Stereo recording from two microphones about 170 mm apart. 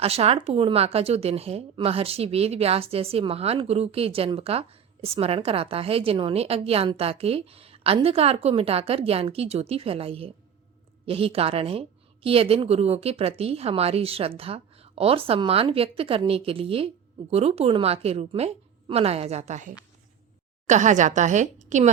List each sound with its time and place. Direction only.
0.0 s a woman's voice: 35° right (ahead or behind)